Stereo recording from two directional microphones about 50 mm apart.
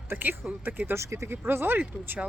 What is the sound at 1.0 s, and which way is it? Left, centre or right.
Speech, right.